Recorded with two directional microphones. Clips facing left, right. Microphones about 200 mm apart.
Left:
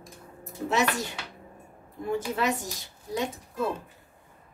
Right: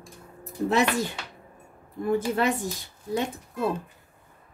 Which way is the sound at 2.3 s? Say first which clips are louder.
Right 3 dB; 55° right (ahead or behind).